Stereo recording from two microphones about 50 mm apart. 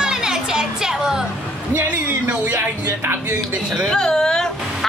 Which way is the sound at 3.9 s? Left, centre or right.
Centre.